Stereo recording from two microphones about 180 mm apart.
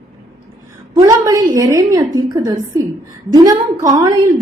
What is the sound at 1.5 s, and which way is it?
A woman's voice, 20° right (ahead or behind).